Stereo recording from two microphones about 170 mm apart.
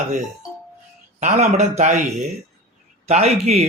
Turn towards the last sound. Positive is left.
turn(degrees=-40)  # may be behind; listen again after turning